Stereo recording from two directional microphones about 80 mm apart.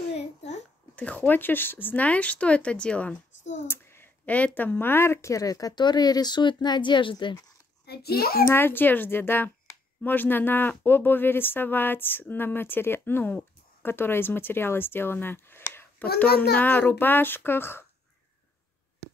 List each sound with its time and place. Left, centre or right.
0.9 s speech: centre
3.6 s a sound: left
4.6 s speech: left
8.5 s speech: left